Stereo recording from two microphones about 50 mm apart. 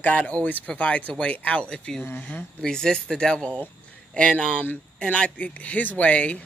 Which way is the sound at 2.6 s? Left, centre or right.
Centre.